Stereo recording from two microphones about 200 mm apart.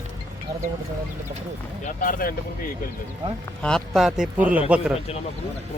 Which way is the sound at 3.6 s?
Centre (ahead or behind).